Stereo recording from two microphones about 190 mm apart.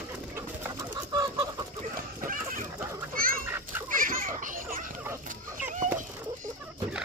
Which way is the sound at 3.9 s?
45° right (ahead or behind).